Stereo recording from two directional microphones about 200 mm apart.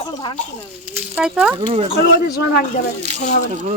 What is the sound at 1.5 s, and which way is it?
Speech, 25° right (ahead or behind).